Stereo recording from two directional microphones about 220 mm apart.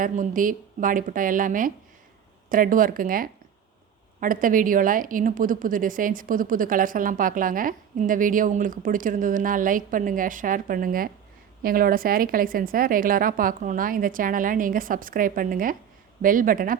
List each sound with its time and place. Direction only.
0.0 s a woman's voice: 40° right (ahead or behind)